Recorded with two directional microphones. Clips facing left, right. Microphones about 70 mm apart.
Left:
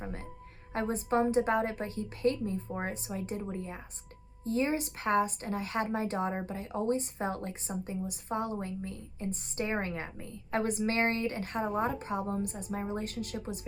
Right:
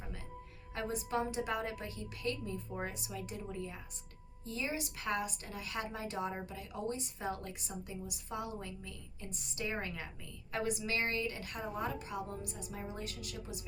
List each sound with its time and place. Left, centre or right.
0.7 s speech: left